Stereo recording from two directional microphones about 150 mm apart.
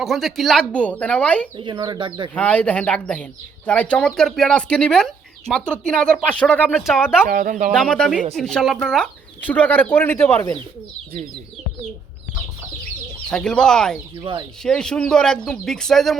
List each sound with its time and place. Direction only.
0.0 s speech: centre (ahead or behind)
1.5 s speech: 30° right (ahead or behind)
2.3 s speech: 10° left (ahead or behind)
6.8 s speech: 5° right (ahead or behind)
7.3 s speech: 65° right (ahead or behind)
7.7 s speech: 5° left (ahead or behind)
13.3 s speech: 5° left (ahead or behind)
14.2 s speech: 35° right (ahead or behind)
14.6 s speech: 5° left (ahead or behind)